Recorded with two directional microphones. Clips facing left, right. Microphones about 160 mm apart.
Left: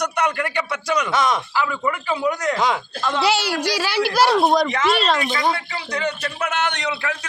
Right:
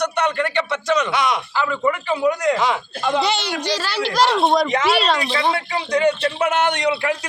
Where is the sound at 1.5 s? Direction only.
5° left (ahead or behind).